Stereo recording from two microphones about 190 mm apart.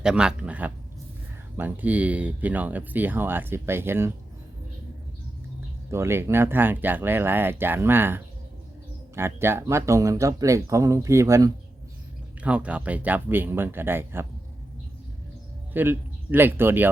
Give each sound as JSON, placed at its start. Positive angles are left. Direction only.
{"t": 0.0, "sound": "speech", "side_deg": -5}
{"t": 5.9, "sound": "speech", "side_deg": -15}
{"t": 15.7, "sound": "speech", "side_deg": -10}